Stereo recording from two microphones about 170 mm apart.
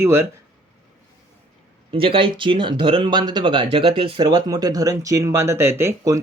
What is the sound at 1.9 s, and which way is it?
Speech, 30° right (ahead or behind).